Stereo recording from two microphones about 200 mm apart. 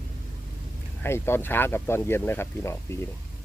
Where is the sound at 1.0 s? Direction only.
10° left (ahead or behind).